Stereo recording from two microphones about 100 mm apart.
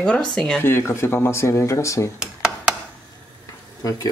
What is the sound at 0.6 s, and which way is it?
Speech, 25° left (ahead or behind).